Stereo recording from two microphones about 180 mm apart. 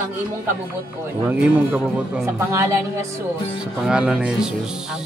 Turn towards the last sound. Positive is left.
turn(degrees=-5)  # may be behind; listen again after turning